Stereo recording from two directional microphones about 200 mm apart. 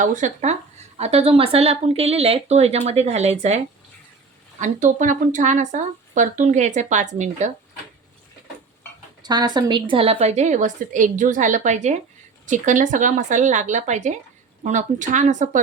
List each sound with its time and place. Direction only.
0.0 s speech: 40° right (ahead or behind)
4.6 s speech: 40° right (ahead or behind)
9.2 s speech: 20° right (ahead or behind); by 15.6 s 40° right (ahead or behind)